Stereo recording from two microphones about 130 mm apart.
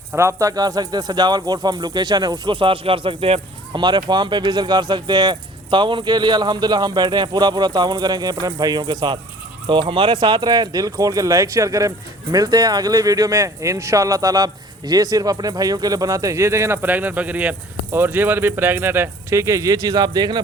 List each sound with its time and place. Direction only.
0.2 s speech: 25° right (ahead or behind); by 3.4 s 45° right (ahead or behind)
3.7 s speech: 35° right (ahead or behind)